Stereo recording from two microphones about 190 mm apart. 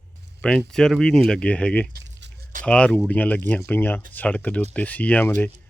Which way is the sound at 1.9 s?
70° right (ahead or behind).